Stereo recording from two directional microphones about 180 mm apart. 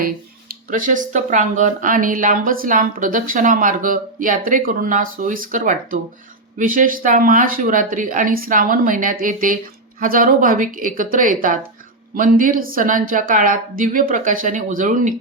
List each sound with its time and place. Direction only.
0.7 s speech: 45° right (ahead or behind)